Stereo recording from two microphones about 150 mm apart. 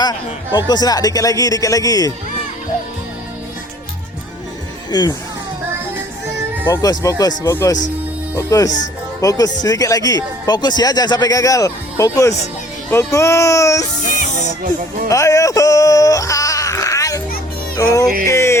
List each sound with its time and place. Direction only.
0.0 s speech: 30° left (ahead or behind)
4.9 s speech: 25° left (ahead or behind)
6.7 s speech: 25° left (ahead or behind)
14.0 s music: 65° left (ahead or behind)
15.1 s speech: 20° left (ahead or behind)
18.3 s speech: 20° left (ahead or behind)